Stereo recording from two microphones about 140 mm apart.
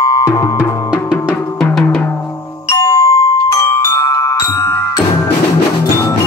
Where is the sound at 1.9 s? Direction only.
15° left (ahead or behind).